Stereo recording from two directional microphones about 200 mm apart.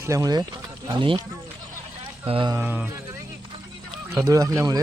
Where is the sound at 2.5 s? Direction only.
10° right (ahead or behind).